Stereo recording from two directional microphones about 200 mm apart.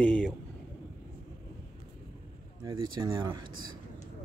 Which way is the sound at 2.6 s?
15° right (ahead or behind).